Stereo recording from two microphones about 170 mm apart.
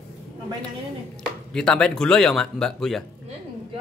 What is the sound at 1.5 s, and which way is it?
Speech, 5° left (ahead or behind).